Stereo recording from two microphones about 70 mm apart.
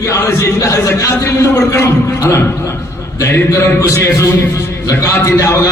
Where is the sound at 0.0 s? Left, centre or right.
Left.